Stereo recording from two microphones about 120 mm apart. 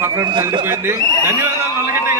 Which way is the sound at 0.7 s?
20° right (ahead or behind).